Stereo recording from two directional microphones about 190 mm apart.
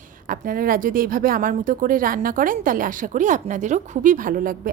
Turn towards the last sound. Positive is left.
turn(degrees=-45)  # may be behind; listen again after turning